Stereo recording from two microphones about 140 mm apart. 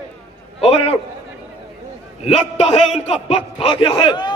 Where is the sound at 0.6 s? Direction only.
45° left (ahead or behind).